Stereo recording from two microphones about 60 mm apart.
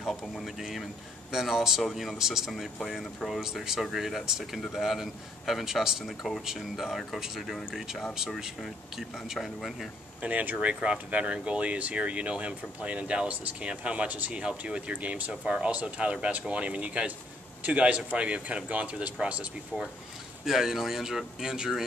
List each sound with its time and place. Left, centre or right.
0.0 s a man's voice: centre
10.2 s speech: right
20.4 s speech: centre